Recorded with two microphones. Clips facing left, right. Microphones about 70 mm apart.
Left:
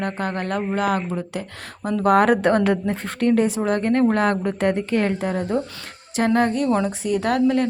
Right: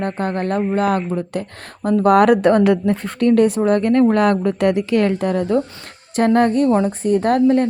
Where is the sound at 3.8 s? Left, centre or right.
Left.